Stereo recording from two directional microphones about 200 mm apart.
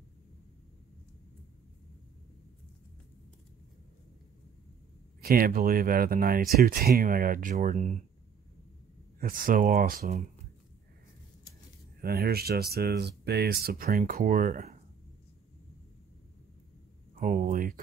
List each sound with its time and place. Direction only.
5.2 s speech: 45° right (ahead or behind)
9.2 s speech: 45° right (ahead or behind)
12.0 s speech: 50° right (ahead or behind)
17.2 s speech: 40° right (ahead or behind)